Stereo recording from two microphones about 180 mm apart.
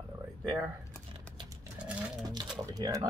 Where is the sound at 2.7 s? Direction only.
20° right (ahead or behind).